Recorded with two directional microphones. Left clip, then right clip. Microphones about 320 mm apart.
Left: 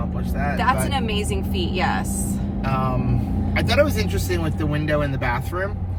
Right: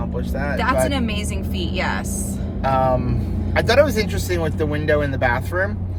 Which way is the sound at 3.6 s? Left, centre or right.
Centre.